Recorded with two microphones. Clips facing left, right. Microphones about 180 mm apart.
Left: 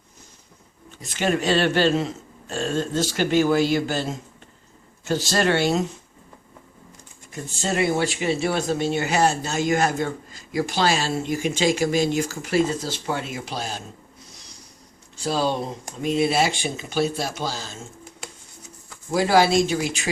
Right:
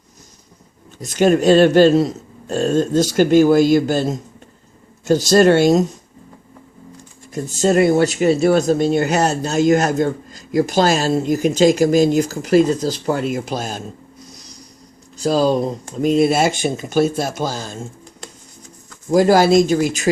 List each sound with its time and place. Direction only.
1.0 s speech: 45° right (ahead or behind)
7.3 s speech: 40° right (ahead or behind)
15.1 s speech: 40° right (ahead or behind)
18.2 s a sound: 5° left (ahead or behind)
19.1 s speech: 45° right (ahead or behind)